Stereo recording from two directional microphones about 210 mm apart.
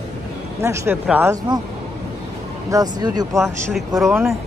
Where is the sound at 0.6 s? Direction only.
10° right (ahead or behind).